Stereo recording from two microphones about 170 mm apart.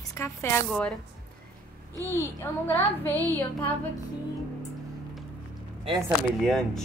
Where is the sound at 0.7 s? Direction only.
5° left (ahead or behind).